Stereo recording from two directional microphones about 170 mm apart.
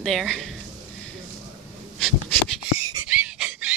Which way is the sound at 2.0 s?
5° left (ahead or behind).